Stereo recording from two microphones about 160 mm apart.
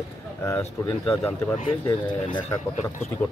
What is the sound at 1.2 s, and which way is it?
Speech, 10° left (ahead or behind).